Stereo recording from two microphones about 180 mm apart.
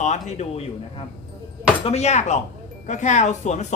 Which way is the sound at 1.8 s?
35° left (ahead or behind).